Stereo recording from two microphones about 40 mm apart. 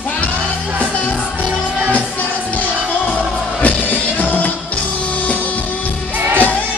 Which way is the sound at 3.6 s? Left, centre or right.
Left.